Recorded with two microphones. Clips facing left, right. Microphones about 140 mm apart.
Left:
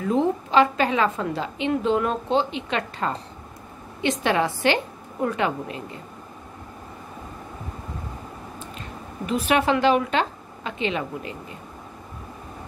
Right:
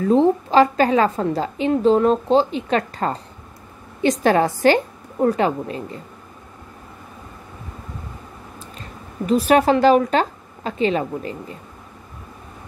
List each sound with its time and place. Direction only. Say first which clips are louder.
0.0 s a woman's voice: right 6 dB; 35° right (ahead or behind)
9.2 s a woman's voice: right 6 dB; 40° right (ahead or behind)